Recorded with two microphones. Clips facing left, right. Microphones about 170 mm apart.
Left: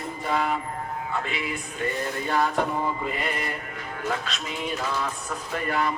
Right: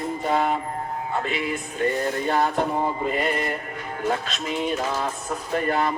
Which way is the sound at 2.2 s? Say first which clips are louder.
Even; 40° right (ahead or behind).